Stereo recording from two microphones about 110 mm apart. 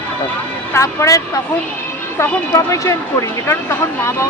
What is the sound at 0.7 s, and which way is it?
Speech, 25° left (ahead or behind).